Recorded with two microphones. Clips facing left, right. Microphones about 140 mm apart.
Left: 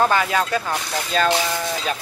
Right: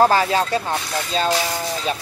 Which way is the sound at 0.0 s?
35° right (ahead or behind).